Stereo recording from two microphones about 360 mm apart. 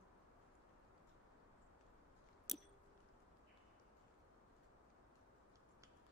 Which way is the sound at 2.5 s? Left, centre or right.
Centre.